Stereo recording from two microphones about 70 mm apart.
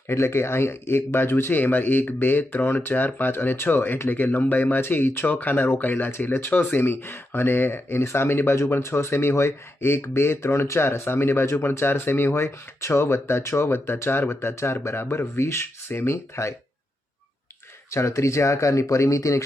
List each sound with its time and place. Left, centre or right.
0.1 s speech: left
17.9 s speech: left